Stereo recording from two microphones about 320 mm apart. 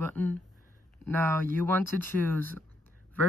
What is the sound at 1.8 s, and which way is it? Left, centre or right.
Speech, right.